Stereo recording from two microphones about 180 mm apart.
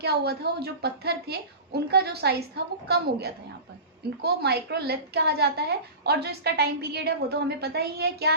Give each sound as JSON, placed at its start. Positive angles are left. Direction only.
{"t": 0.0, "sound": "a woman's voice", "side_deg": -65}